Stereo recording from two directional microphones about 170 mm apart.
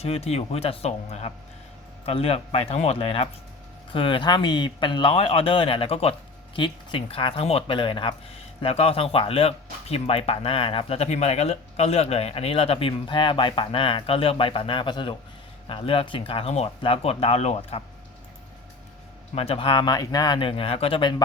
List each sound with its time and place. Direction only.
0.0 s speech: 35° left (ahead or behind)
19.3 s speech: 35° left (ahead or behind)